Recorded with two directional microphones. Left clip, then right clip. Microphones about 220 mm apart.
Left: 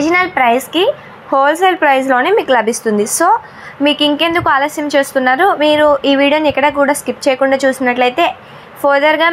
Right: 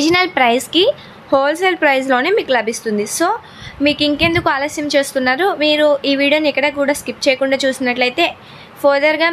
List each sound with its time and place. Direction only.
0.0 s a woman's voice: 20° right (ahead or behind)
1.4 s a woman's voice: centre (ahead or behind)